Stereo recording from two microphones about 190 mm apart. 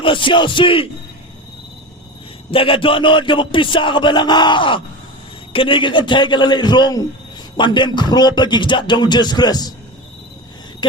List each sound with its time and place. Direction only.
0.0 s speech: 25° left (ahead or behind)
2.5 s speech: 30° left (ahead or behind)